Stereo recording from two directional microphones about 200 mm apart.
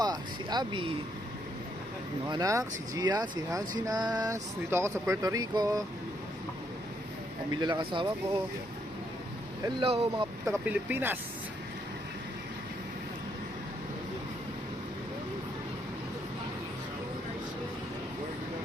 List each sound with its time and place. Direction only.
0.0 s speech: 20° right (ahead or behind)
2.3 s speech: 15° right (ahead or behind)
7.5 s speech: 20° right (ahead or behind)
9.6 s speech: 30° right (ahead or behind)
10.4 s speech: 10° right (ahead or behind)